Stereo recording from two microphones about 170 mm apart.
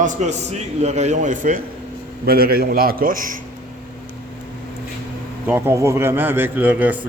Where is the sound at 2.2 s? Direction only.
65° right (ahead or behind).